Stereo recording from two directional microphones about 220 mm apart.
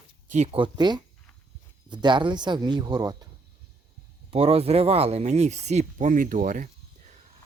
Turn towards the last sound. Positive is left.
turn(degrees=-40)  # may be behind; listen again after turning